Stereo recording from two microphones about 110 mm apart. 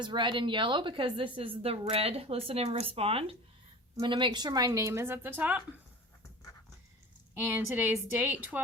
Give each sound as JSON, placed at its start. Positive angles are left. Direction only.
{"t": 0.0, "sound": "a woman's voice", "side_deg": -45}
{"t": 4.0, "sound": "a woman's voice", "side_deg": -45}
{"t": 7.3, "sound": "a woman's voice", "side_deg": -15}